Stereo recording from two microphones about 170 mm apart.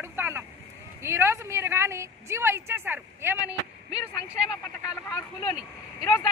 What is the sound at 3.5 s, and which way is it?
Speech, 20° left (ahead or behind).